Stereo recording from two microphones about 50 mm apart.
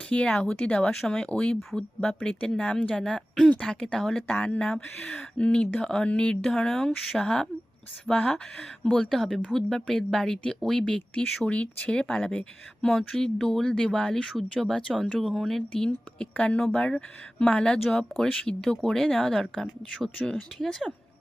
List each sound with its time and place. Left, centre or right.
0.3 s speech: centre
4.3 s speech: left
4.6 s speech: centre
5.4 s speech: left
11.4 s speech: left; by 14.8 s centre
15.2 s speech: centre
15.7 s speech: centre